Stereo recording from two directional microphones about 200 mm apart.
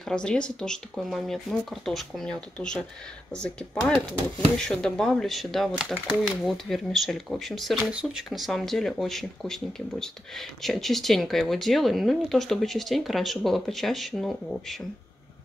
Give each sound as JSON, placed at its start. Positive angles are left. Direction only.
{"t": 0.1, "sound": "speech", "side_deg": 5}